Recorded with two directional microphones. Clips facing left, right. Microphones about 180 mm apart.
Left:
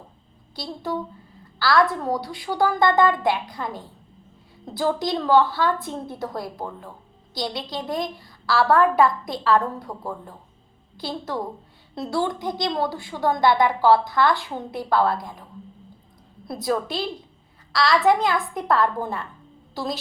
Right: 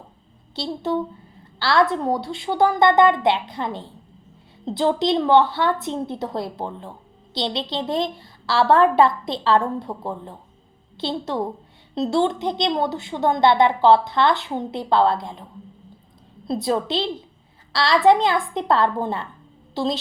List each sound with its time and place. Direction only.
0.5 s a woman's voice: 25° right (ahead or behind)
16.5 s a woman's voice: 25° right (ahead or behind)